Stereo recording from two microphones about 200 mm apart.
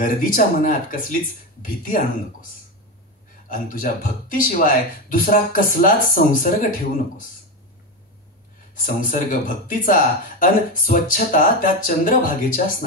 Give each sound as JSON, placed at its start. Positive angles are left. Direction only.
{"t": 0.0, "sound": "speech", "side_deg": 45}
{"t": 3.4, "sound": "speech", "side_deg": 45}
{"t": 8.7, "sound": "speech", "side_deg": 45}